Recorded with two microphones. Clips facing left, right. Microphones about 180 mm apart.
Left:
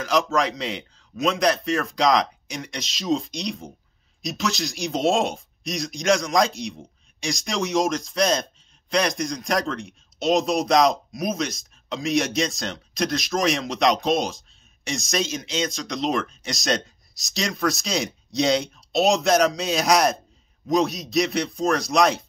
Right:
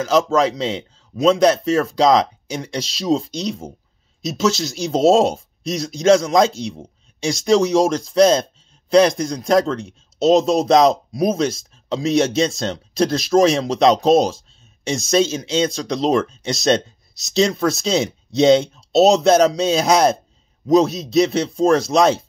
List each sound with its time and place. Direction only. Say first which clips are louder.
0.0 s a man's voice: right 6 dB; 25° right (ahead or behind)